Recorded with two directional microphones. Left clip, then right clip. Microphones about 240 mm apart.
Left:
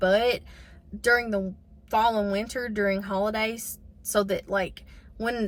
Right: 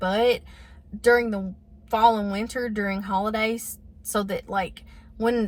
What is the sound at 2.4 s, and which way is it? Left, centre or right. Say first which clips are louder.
Speech: left 1 dB; centre.